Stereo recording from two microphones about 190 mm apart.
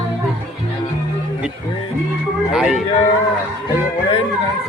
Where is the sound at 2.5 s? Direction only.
5° right (ahead or behind).